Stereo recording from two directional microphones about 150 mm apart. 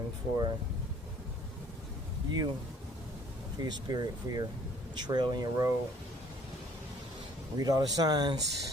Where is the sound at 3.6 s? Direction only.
25° right (ahead or behind).